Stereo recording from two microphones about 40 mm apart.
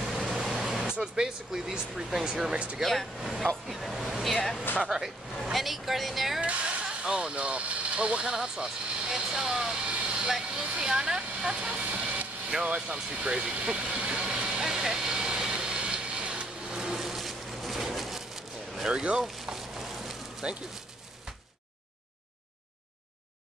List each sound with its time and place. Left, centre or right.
0.0 s vehicle: centre
1.0 s speech: centre
2.8 s speech: centre
3.6 s speech: centre
4.8 s speech: centre
6.4 s speech: right; by 9.8 s centre
9.8 s vehicle: right
10.5 s speech: right
12.6 s vehicle: right
16.7 s a sound: centre
18.9 s speech: right
19.4 s a sound: centre